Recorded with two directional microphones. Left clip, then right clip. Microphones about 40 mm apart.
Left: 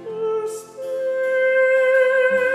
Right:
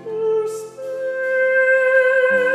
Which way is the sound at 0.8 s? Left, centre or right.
Centre.